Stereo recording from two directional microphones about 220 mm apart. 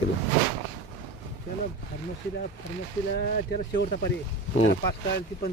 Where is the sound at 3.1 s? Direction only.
40° left (ahead or behind).